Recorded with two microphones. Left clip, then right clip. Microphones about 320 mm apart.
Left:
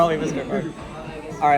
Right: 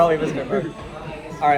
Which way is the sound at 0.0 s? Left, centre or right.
Centre.